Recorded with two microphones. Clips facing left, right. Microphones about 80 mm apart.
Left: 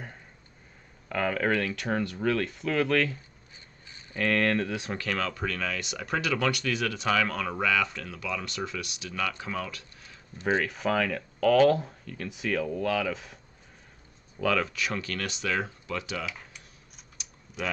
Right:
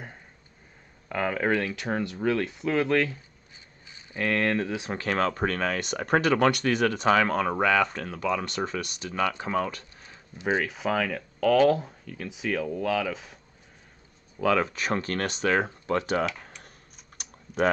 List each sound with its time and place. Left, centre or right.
1.0 s speech: centre
4.1 s speech: centre
4.9 s speech: right
10.3 s speech: centre
14.6 s speech: right
17.2 s typing: right